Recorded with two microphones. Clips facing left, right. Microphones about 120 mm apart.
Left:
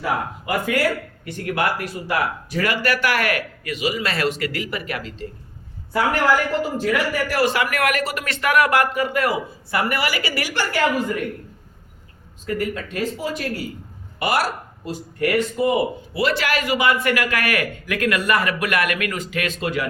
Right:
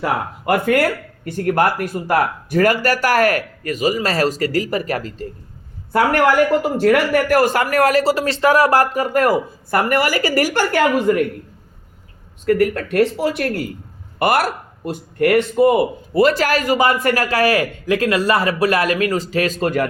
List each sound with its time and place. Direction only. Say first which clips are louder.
0.0 s speech: right 3 dB; 55° right (ahead or behind)
6.6 s speech: right 6 dB; 65° right (ahead or behind)
12.5 s a man's voice: right 9 dB; 65° right (ahead or behind); by 19.9 s 45° right (ahead or behind)